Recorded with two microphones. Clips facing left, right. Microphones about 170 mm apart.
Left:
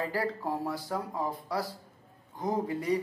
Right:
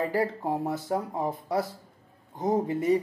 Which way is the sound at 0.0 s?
20° right (ahead or behind).